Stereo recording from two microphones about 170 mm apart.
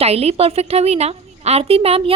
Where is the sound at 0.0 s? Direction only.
35° right (ahead or behind).